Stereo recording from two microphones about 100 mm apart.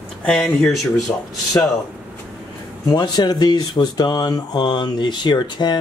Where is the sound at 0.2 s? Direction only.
5° left (ahead or behind).